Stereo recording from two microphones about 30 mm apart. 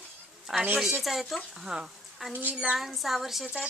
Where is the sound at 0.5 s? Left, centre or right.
Centre.